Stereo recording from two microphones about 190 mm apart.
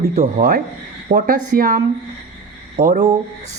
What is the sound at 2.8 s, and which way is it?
Speech, 35° right (ahead or behind).